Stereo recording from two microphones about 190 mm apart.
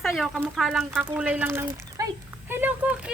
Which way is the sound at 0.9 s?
10° right (ahead or behind).